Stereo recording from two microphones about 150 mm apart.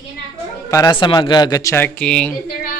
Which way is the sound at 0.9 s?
30° left (ahead or behind).